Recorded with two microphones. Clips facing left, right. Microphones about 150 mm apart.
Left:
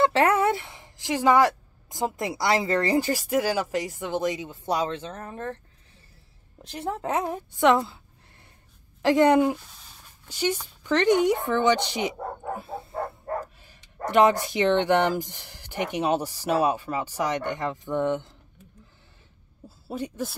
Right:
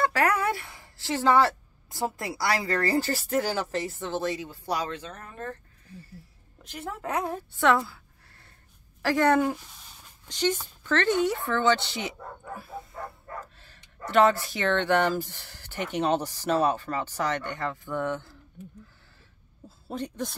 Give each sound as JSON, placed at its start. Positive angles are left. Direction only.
{"t": 0.0, "sound": "speech", "side_deg": 25}
{"t": 6.6, "sound": "a woman's voice", "side_deg": 30}
{"t": 14.0, "sound": "speech", "side_deg": 15}
{"t": 19.9, "sound": "speech", "side_deg": 5}